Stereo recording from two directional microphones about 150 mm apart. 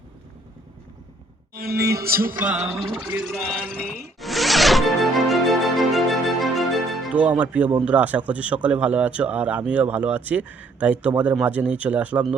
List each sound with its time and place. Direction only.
1.5 s speech: 90° right
3.0 s speech: 10° right (ahead or behind)
3.5 s zipper: 5° left (ahead or behind)
7.1 s speech: 10° right (ahead or behind)